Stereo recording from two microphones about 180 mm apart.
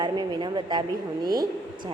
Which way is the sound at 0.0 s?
25° right (ahead or behind).